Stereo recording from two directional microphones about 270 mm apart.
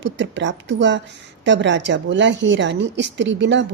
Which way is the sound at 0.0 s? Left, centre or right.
Right.